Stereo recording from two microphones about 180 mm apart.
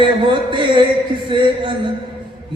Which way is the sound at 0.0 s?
25° right (ahead or behind).